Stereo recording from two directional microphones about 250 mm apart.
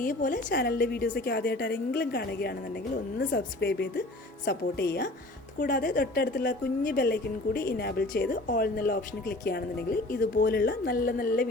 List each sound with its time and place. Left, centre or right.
0.0 s speech: left